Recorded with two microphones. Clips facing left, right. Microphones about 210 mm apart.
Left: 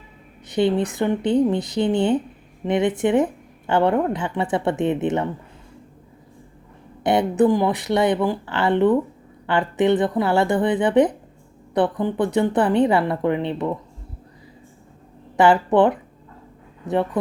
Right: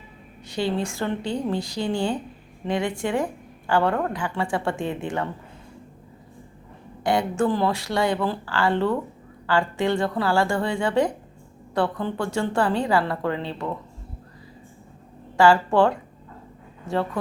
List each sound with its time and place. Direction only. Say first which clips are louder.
0.4 s speech: left 6 dB; 20° left (ahead or behind)
7.0 s speech: left 5 dB; 20° left (ahead or behind)
15.4 s speech: left 2 dB; 20° left (ahead or behind)